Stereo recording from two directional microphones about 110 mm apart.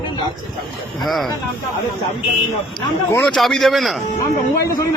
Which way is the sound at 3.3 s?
5° left (ahead or behind).